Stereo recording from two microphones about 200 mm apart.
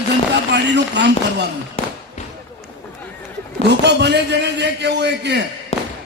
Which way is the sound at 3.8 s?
60° right (ahead or behind).